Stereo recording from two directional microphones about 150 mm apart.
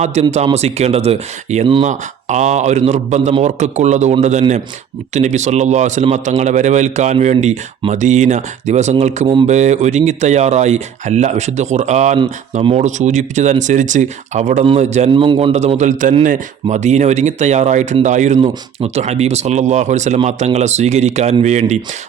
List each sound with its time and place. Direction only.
0.0 s speech: 45° right (ahead or behind)
9.2 s a man's voice: 30° right (ahead or behind)
9.5 s speech: 50° right (ahead or behind)
15.1 s a man's voice: 35° right (ahead or behind)
15.5 s speech: 50° right (ahead or behind)